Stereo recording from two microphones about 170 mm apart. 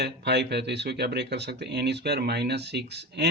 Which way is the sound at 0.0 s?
80° right.